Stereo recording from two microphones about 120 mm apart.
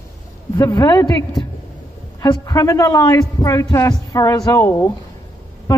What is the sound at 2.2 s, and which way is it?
A man's voice, 30° left (ahead or behind).